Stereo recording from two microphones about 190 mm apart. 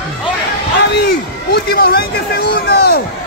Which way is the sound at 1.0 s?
55° left (ahead or behind).